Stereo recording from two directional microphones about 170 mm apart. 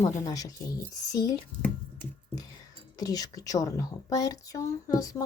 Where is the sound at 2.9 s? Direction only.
20° left (ahead or behind).